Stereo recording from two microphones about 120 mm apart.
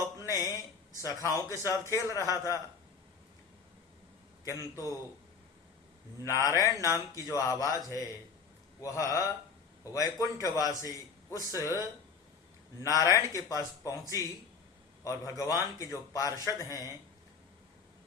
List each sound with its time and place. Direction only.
0.3 s a sound: 30° left (ahead or behind)
1.0 s a man's voice: 25° left (ahead or behind)
4.4 s a man's voice: 25° left (ahead or behind)
6.2 s a man's voice: 25° left (ahead or behind)
12.8 s a man's voice: 30° left (ahead or behind)
15.0 s a man's voice: 25° left (ahead or behind)